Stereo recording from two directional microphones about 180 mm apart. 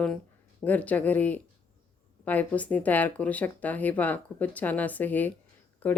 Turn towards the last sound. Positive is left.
turn(degrees=10)  # may be behind; listen again after turning